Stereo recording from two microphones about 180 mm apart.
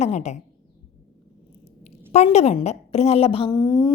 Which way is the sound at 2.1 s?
35° left (ahead or behind).